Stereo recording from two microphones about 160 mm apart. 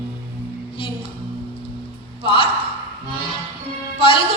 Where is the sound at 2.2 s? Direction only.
35° left (ahead or behind).